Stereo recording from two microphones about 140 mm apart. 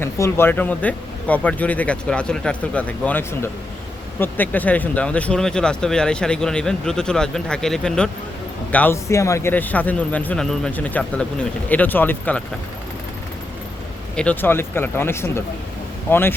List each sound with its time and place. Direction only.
0.0 s speech: 15° left (ahead or behind)
14.2 s speech: 10° left (ahead or behind)